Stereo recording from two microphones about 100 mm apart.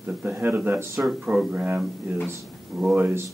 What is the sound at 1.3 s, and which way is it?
Speech, 15° right (ahead or behind).